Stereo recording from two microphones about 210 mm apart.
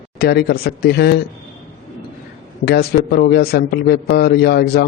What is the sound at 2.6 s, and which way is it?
A man's voice, 50° left (ahead or behind).